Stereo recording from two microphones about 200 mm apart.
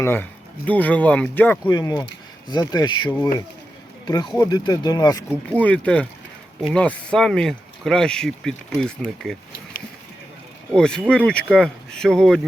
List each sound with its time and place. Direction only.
0.0 s speech: 10° left (ahead or behind)
5.5 s speech: 5° left (ahead or behind)
10.7 s speech: 5° left (ahead or behind)